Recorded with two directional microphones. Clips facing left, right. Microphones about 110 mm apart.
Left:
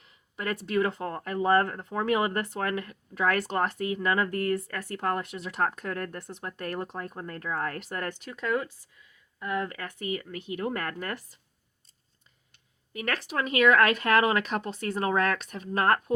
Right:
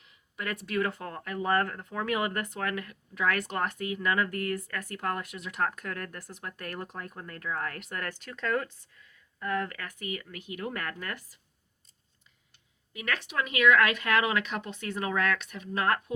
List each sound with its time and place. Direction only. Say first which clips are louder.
0.0 s speech: left 3 dB; 35° left (ahead or behind)
8.2 s speech: even; 15° left (ahead or behind)
9.7 s speech: left 4 dB; 30° left (ahead or behind)
12.9 s speech: left 3 dB; 45° left (ahead or behind)